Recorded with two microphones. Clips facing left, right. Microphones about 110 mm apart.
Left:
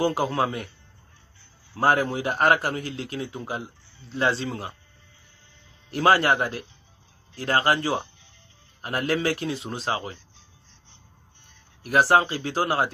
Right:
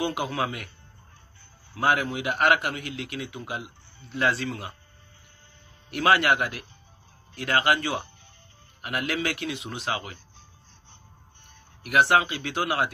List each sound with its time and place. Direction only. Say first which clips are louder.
0.0 s a man's voice: left 4 dB; 35° left (ahead or behind)
1.8 s a man's voice: left 3 dB; 35° left (ahead or behind)
5.9 s a man's voice: left 2 dB; 30° left (ahead or behind)
11.8 s a man's voice: left 2 dB; 35° left (ahead or behind)